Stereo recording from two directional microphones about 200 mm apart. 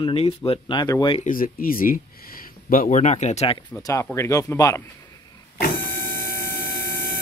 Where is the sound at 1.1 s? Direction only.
40° left (ahead or behind).